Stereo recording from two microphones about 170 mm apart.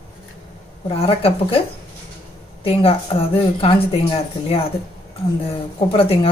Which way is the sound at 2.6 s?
35° left (ahead or behind).